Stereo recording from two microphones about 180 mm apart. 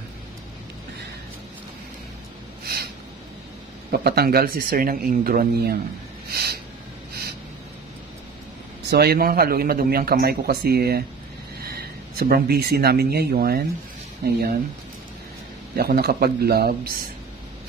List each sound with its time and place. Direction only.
2.6 s a sound: 55° right (ahead or behind)
4.0 s speech: 60° right (ahead or behind)
6.3 s snort: 60° right (ahead or behind)
8.9 s speech: 60° right (ahead or behind)
15.7 s speech: 55° right (ahead or behind)